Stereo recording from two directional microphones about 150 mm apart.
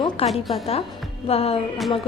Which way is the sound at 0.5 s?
45° left (ahead or behind).